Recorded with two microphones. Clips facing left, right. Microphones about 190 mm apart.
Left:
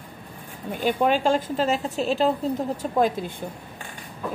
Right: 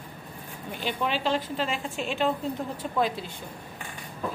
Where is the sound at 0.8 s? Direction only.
50° left (ahead or behind).